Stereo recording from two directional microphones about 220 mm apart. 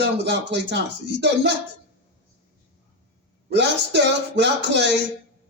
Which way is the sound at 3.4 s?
50° right (ahead or behind).